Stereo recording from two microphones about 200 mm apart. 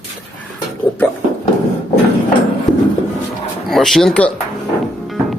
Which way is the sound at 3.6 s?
Centre (ahead or behind).